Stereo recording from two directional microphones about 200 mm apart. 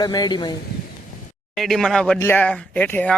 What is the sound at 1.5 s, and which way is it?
Speech, centre (ahead or behind).